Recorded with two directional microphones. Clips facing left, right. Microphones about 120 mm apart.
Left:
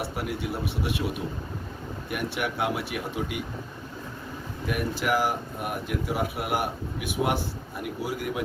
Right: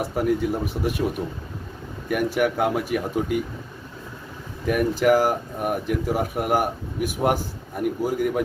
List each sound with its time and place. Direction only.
0.0 s speech: 45° right (ahead or behind)
2.0 s speech: 45° right (ahead or behind)
4.6 s speech: 45° right (ahead or behind)